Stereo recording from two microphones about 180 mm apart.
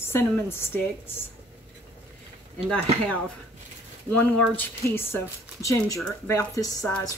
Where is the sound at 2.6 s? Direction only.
5° left (ahead or behind).